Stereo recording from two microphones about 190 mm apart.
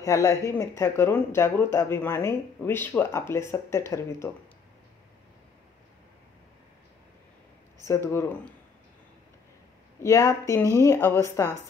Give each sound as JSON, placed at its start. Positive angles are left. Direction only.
{"t": 0.0, "sound": "speech", "side_deg": 15}
{"t": 7.8, "sound": "speech", "side_deg": 15}
{"t": 9.9, "sound": "speech", "side_deg": 15}